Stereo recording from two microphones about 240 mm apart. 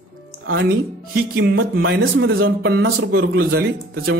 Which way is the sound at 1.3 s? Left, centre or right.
Right.